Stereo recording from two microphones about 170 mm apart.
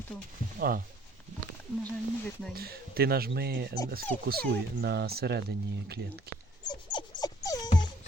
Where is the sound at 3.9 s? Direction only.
60° right (ahead or behind).